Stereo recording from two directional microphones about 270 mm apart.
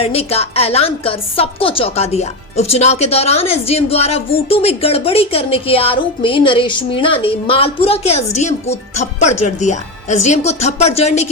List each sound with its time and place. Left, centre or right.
0.0 s a woman's voice: left